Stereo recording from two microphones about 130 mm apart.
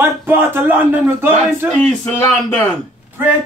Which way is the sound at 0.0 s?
15° right (ahead or behind).